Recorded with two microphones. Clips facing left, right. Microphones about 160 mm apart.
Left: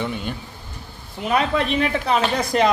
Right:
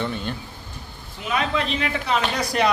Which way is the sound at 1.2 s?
50° left (ahead or behind).